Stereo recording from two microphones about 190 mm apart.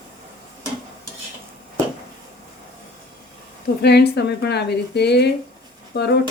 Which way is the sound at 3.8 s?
60° left (ahead or behind).